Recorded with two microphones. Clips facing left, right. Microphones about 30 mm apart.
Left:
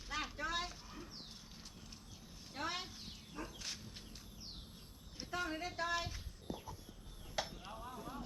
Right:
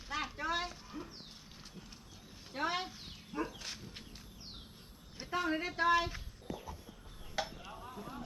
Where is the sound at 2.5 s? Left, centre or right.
Centre.